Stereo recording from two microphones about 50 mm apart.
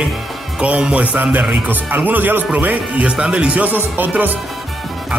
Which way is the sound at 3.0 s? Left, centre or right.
Right.